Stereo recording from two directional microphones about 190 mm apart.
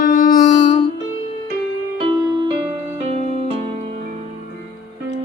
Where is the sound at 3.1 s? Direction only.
35° right (ahead or behind).